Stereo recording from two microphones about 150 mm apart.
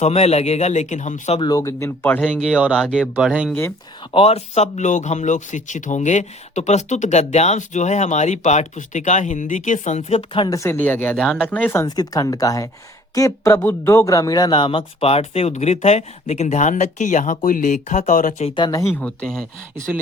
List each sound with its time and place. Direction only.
0.0 s speech: 45° left (ahead or behind)
1.4 s speech: 25° left (ahead or behind)
2.2 s speech: 5° right (ahead or behind)
4.1 s speech: 40° left (ahead or behind); by 11.9 s 15° left (ahead or behind)
11.9 s speech: 25° left (ahead or behind); by 18.4 s 60° left (ahead or behind)
18.4 s speech: 30° left (ahead or behind)
18.9 s speech: 5° left (ahead or behind)